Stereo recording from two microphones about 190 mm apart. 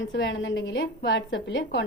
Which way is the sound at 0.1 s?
70° left (ahead or behind).